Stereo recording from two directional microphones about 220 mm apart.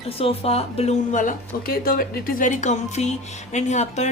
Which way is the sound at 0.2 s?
25° left (ahead or behind).